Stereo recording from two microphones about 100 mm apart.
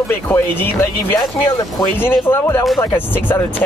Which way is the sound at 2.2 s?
20° left (ahead or behind).